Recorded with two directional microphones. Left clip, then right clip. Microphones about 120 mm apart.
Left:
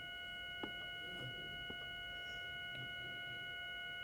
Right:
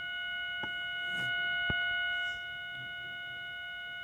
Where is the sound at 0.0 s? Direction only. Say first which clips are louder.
Right 11 dB; 35° right (ahead or behind).